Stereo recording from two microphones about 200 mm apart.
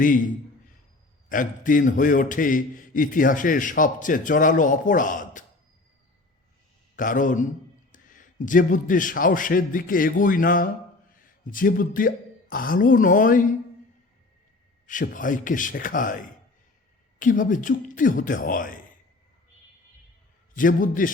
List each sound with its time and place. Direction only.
1.3 s a man's voice: 40° left (ahead or behind)
6.9 s a man's voice: 40° left (ahead or behind)
14.8 s a man's voice: 40° left (ahead or behind)
20.6 s a man's voice: 40° left (ahead or behind)